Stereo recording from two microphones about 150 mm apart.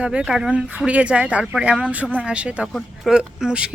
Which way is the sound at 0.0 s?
5° right (ahead or behind).